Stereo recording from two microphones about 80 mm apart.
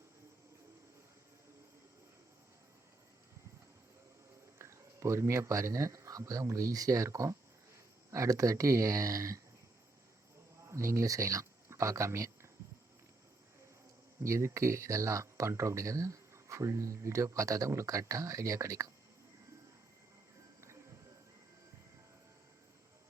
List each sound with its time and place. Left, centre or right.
4.5 s speech: right
10.7 s speech: right
14.2 s speech: right